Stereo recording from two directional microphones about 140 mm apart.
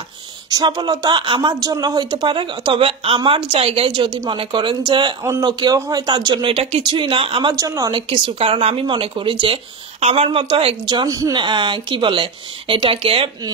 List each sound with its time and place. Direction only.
0.5 s speech: 30° right (ahead or behind)
7.5 s speech: 25° right (ahead or behind)
8.1 s speech: 40° right (ahead or behind)
9.9 s speech: 50° right (ahead or behind)